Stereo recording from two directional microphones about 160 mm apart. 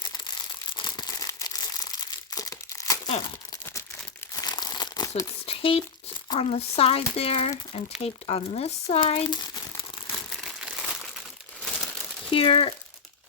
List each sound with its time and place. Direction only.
0.7 s crumpling: 30° left (ahead or behind)
3.1 s speech: 35° left (ahead or behind)
4.4 s crumpling: 25° left (ahead or behind)
5.5 s crumpling: 35° left (ahead or behind)
6.3 s speech: 40° left (ahead or behind)
9.2 s speech: 25° left (ahead or behind)
10.2 s crumpling: centre (ahead or behind)
12.3 s speech: 35° left (ahead or behind)